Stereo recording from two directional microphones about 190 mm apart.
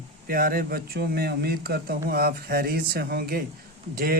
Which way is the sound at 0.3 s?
50° right (ahead or behind).